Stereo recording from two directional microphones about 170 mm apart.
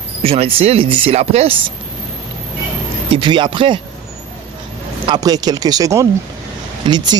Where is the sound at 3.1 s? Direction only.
30° right (ahead or behind).